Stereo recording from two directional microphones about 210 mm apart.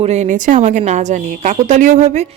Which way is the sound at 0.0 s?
30° right (ahead or behind).